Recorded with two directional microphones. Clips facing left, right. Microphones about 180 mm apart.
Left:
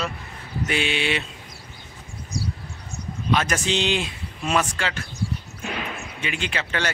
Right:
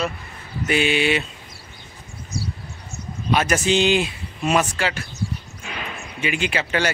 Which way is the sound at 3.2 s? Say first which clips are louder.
Right 3 dB; 10° right (ahead or behind).